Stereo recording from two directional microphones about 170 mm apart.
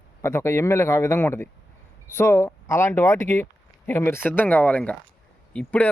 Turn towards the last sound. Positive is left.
turn(degrees=5)  # may be behind; listen again after turning